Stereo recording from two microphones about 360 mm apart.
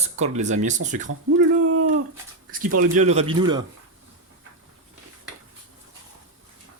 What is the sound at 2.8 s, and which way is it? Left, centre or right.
Speech, centre.